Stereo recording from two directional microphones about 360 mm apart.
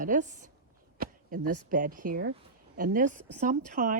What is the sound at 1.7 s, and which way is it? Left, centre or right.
A woman's voice, right.